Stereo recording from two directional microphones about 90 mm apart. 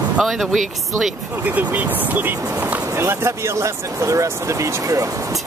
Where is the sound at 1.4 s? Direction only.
15° right (ahead or behind); by 5.1 s 35° right (ahead or behind).